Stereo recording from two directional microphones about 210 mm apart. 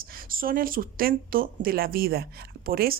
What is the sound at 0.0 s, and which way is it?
Speech, 45° right (ahead or behind).